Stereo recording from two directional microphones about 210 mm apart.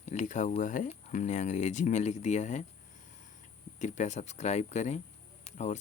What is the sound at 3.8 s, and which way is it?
Speech, 35° left (ahead or behind).